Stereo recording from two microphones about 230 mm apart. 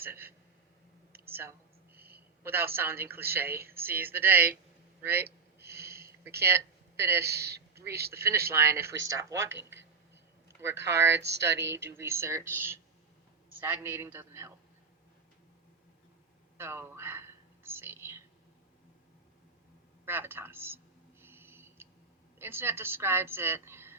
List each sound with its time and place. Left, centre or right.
0.0 s a woman's voice: centre
1.1 s a sound: right
1.4 s a sound: centre
3.3 s a woman's voice: centre
4.9 s a sound: centre
7.3 s a woman's voice: right
8.1 s a woman's voice: centre
10.8 s a woman's voice: centre
11.1 s a woman's voice: right
11.6 s a woman's voice: centre
16.6 s whispering: centre
20.1 s a sound: centre
22.4 s a woman's voice: centre